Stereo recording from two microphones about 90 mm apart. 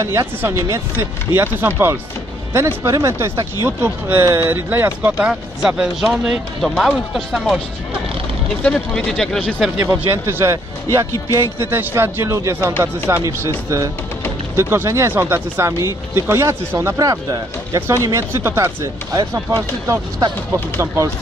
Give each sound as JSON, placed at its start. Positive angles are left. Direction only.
{"t": 0.0, "sound": "speech", "side_deg": -30}
{"t": 3.6, "sound": "speech", "side_deg": -20}
{"t": 4.2, "sound": "speech", "side_deg": -35}
{"t": 5.2, "sound": "speech", "side_deg": -10}
{"t": 8.6, "sound": "speech", "side_deg": 5}
{"t": 9.8, "sound": "speech", "side_deg": -30}
{"t": 14.6, "sound": "speech", "side_deg": -30}